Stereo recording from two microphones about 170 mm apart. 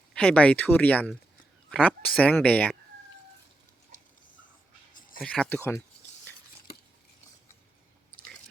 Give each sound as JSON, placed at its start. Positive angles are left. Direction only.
{"t": 0.1, "sound": "speech", "side_deg": 5}
{"t": 5.2, "sound": "speech", "side_deg": 5}
{"t": 6.7, "sound": "cutlery", "side_deg": 65}